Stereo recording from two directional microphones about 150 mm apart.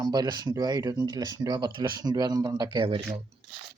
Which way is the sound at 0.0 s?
25° right (ahead or behind).